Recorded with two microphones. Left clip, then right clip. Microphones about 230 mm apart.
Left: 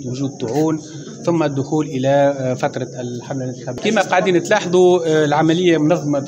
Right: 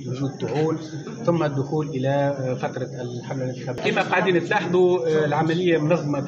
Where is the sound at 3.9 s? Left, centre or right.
Left.